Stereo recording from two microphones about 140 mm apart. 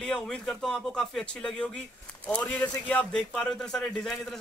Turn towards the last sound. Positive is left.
turn(degrees=0)  # may be behind; listen again after turning